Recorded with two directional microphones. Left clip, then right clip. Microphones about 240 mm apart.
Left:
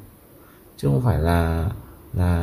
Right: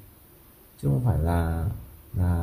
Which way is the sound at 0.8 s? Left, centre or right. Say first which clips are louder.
Left 7 dB; centre.